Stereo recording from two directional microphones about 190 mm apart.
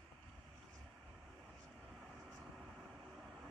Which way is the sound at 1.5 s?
Centre (ahead or behind).